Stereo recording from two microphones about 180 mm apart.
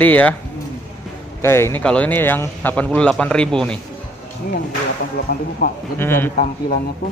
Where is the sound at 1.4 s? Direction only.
15° left (ahead or behind).